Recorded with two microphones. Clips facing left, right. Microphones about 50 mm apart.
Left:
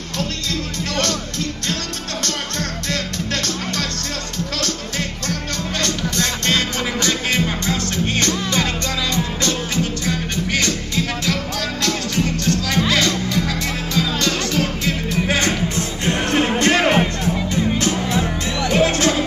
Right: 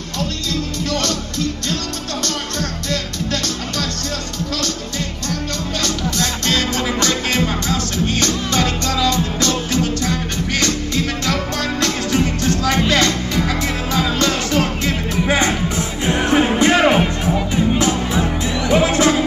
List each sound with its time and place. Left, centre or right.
5.8 s music: left
6.4 s music: left
7.1 s music: centre
7.6 s music: left
11.8 s music: centre
15.2 s music: centre
18.7 s music: centre